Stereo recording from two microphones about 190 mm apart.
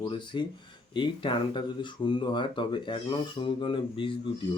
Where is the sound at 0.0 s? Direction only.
25° left (ahead or behind).